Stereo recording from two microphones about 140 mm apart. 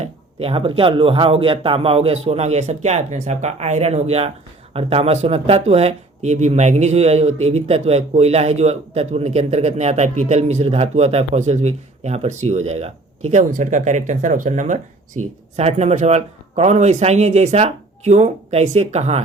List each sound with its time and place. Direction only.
0.0 s speech: 45° right (ahead or behind)
13.3 s speech: 60° right (ahead or behind)